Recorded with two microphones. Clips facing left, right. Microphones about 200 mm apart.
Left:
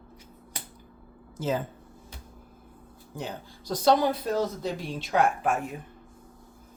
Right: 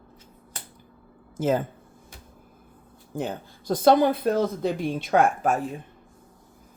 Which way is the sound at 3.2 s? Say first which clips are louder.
Right 6 dB; 50° right (ahead or behind).